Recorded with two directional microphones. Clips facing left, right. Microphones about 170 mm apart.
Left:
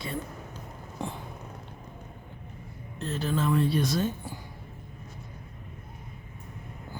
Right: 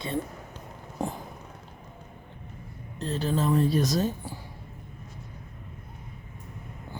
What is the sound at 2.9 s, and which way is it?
Speech, 35° right (ahead or behind).